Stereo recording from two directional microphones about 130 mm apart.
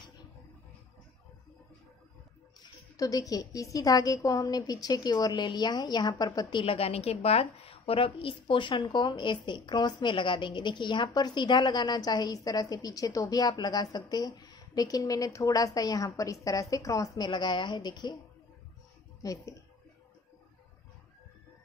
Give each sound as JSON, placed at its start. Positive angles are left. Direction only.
{"t": 2.6, "sound": "a woman's voice", "side_deg": 30}
{"t": 19.2, "sound": "a woman's voice", "side_deg": 25}